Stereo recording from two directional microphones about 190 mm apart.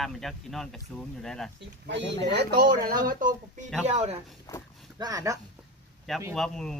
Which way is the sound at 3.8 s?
35° right (ahead or behind).